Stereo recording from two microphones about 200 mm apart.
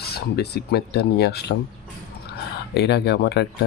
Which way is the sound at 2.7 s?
55° left (ahead or behind).